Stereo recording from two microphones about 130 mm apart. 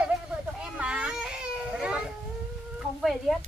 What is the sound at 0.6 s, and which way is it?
Baby cry, 10° right (ahead or behind).